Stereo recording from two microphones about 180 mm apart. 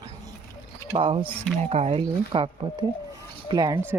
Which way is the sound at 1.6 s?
35° right (ahead or behind).